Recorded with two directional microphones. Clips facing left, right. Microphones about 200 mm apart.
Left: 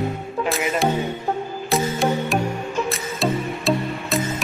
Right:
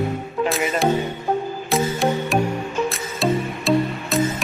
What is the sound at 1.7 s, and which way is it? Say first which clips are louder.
Music: even; centre (ahead or behind).